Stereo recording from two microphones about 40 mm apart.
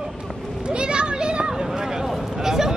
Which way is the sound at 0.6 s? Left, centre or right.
Right.